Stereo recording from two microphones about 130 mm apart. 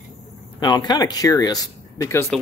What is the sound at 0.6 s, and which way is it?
Speech, 30° left (ahead or behind).